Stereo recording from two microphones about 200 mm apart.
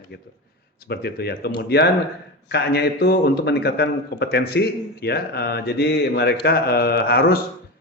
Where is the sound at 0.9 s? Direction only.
55° left (ahead or behind).